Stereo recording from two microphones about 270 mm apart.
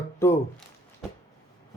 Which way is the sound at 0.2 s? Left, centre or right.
Centre.